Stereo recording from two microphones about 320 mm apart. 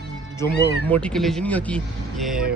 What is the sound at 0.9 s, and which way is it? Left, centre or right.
Speech, centre.